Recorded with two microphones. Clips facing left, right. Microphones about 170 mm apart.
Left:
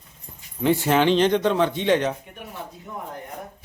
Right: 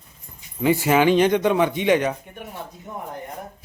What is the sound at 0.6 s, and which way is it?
A man's voice, 5° right (ahead or behind).